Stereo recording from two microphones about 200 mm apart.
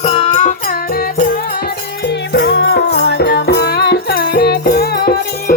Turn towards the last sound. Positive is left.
turn(degrees=50)  # may be behind; listen again after turning